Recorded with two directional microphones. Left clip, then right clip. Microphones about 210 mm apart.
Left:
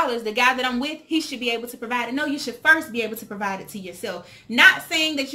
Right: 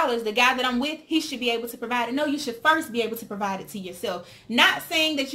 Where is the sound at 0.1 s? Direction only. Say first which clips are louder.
Left 1 dB; 10° right (ahead or behind).